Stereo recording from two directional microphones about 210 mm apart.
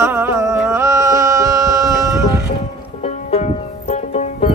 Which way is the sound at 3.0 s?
30° left (ahead or behind).